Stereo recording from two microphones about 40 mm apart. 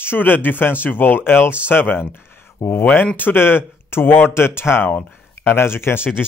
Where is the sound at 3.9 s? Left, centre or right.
Left.